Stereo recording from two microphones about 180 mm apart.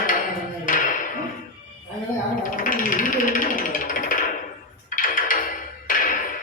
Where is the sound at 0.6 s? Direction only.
50° left (ahead or behind).